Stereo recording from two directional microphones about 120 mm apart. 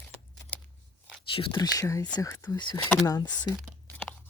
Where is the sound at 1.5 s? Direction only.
30° left (ahead or behind).